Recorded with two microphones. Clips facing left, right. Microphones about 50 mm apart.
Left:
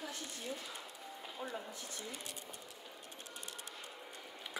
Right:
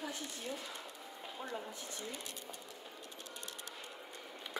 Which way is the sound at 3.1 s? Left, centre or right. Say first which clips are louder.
Left 1 dB; left.